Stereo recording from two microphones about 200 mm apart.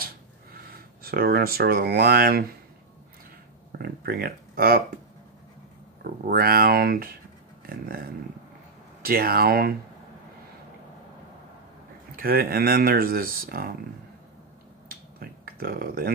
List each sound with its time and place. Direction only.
0.7 s speech: 50° right (ahead or behind)
3.7 s speech: 50° right (ahead or behind)
6.0 s speech: 45° right (ahead or behind)
9.0 s speech: 50° right (ahead or behind)
12.2 s speech: 50° right (ahead or behind)
15.1 s a sound: 45° right (ahead or behind)